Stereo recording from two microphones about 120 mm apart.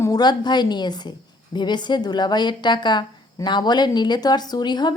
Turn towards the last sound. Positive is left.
turn(degrees=35)  # may be behind; listen again after turning